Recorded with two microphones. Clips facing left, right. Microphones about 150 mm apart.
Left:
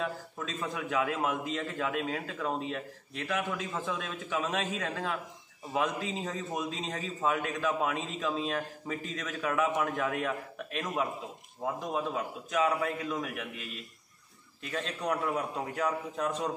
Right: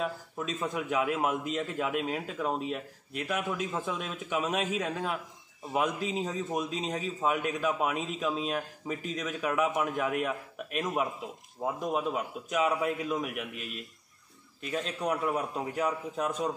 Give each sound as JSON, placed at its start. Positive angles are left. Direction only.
{"t": 0.0, "sound": "a man's voice", "side_deg": -15}
{"t": 14.7, "sound": "a man's voice", "side_deg": -10}